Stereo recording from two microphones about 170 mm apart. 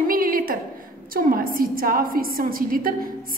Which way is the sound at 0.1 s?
55° right (ahead or behind).